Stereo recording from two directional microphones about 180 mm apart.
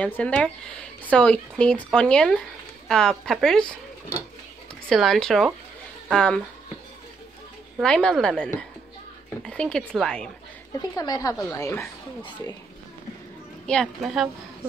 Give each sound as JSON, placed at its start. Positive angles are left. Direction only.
{"t": 0.0, "sound": "speech", "side_deg": 5}
{"t": 4.8, "sound": "speech", "side_deg": 0}
{"t": 7.8, "sound": "speech", "side_deg": 5}
{"t": 10.8, "sound": "speech", "side_deg": 20}
{"t": 13.7, "sound": "speech", "side_deg": 0}